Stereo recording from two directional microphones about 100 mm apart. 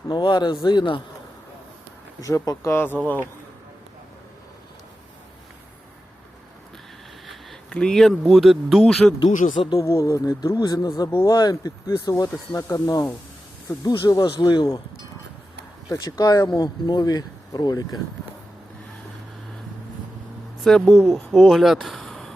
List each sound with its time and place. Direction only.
0.1 s speech: 50° left (ahead or behind)
2.2 s speech: 35° left (ahead or behind)
7.3 s a sound: 10° left (ahead or behind)
8.3 s speech: centre (ahead or behind)
9.1 s speech: 55° left (ahead or behind)
9.7 s speech: 30° left (ahead or behind); by 14.8 s 50° left (ahead or behind)
16.0 s speech: 40° left (ahead or behind)
20.7 s speech: 5° left (ahead or behind)